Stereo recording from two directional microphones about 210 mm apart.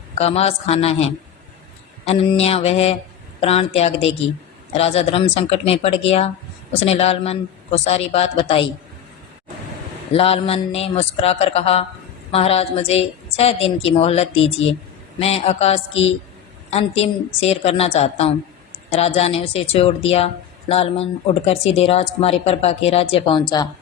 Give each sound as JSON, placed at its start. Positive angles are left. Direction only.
{"t": 0.2, "sound": "speech", "side_deg": 30}
{"t": 2.0, "sound": "speech", "side_deg": 30}
{"t": 10.1, "sound": "a woman's voice", "side_deg": 25}